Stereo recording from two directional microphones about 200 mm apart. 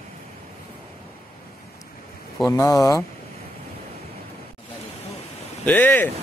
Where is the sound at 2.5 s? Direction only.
15° left (ahead or behind).